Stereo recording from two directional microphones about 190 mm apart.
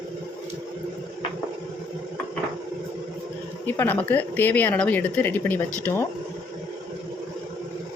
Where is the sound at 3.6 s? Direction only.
10° left (ahead or behind).